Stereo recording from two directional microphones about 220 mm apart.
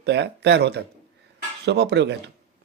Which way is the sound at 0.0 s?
50° right (ahead or behind).